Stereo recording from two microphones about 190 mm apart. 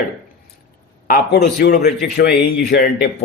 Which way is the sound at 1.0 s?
55° left (ahead or behind).